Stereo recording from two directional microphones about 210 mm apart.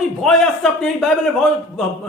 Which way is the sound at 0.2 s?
Centre (ahead or behind).